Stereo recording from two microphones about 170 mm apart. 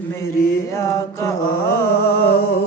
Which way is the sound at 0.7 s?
15° left (ahead or behind).